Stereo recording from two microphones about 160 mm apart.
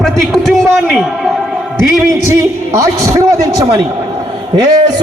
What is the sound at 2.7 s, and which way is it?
A man's voice, 20° right (ahead or behind).